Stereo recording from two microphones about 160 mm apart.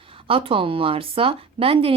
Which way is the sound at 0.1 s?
35° right (ahead or behind).